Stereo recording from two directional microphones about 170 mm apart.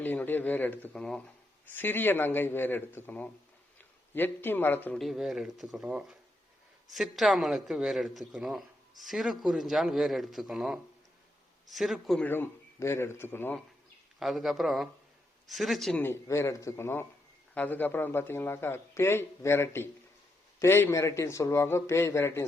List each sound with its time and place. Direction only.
0.0 s a man's voice: 10° left (ahead or behind)
4.9 s a man's voice: centre (ahead or behind)
14.2 s a man's voice: centre (ahead or behind)